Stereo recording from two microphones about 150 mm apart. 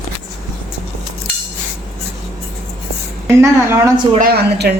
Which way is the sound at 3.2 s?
15° right (ahead or behind).